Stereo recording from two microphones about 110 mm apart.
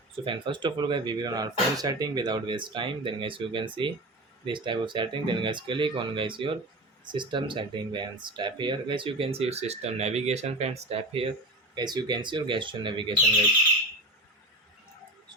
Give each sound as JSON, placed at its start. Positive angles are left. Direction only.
{"t": 0.3, "sound": "speech", "side_deg": -50}
{"t": 11.7, "sound": "speech", "side_deg": -40}